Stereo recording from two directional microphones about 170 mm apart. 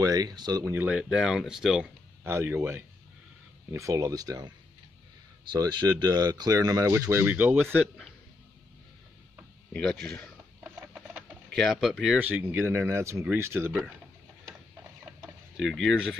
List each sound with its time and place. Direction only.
0.0 s speech: 20° right (ahead or behind); by 1.9 s centre (ahead or behind)
2.2 s speech: 15° right (ahead or behind)
9.7 s speech: 5° left (ahead or behind)
11.5 s speech: centre (ahead or behind)
15.2 s speech: centre (ahead or behind)